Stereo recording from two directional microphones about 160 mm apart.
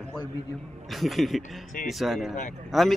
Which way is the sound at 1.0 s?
Centre (ahead or behind).